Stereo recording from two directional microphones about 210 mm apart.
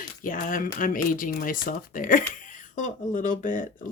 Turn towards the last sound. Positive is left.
turn(degrees=40)  # may be behind; listen again after turning